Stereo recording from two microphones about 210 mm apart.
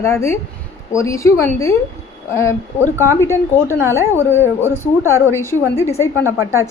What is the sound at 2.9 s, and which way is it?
Speech, 15° right (ahead or behind).